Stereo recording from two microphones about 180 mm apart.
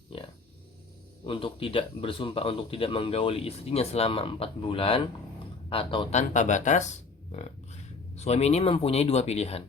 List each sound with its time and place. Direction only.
1.2 s a man's voice: 30° left (ahead or behind)